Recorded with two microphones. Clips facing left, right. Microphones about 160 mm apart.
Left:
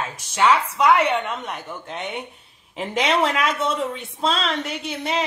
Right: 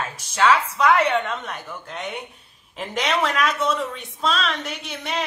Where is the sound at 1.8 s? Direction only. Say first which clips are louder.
Left 1 dB; 25° left (ahead or behind).